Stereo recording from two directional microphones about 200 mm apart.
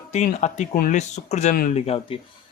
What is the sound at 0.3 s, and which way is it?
A man's voice, 35° left (ahead or behind).